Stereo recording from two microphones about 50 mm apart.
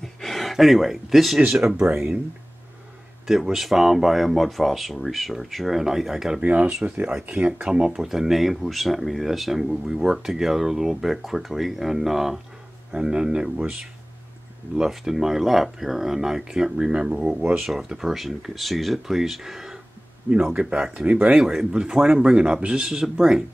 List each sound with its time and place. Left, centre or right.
0.0 s gasp: centre
1.5 s speech: centre
3.3 s speech: centre
6.4 s speech: right
7.9 s speech: centre
12.9 s speech: centre
14.8 s speech: centre
20.9 s speech: right